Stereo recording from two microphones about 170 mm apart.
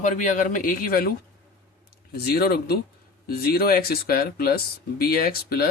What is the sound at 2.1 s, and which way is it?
Speech, 65° left (ahead or behind).